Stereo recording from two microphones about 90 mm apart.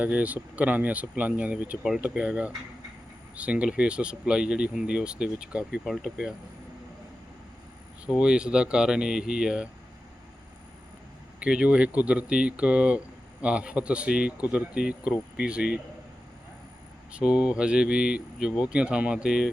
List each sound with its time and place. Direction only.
0.0 s speech: 15° right (ahead or behind)
5.8 s speech: centre (ahead or behind)
8.0 s speech: 10° right (ahead or behind)
11.3 s speech: 10° right (ahead or behind)
17.1 s speech: 10° right (ahead or behind)